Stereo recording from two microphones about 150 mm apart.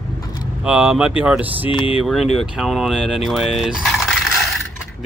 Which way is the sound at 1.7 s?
35° left (ahead or behind).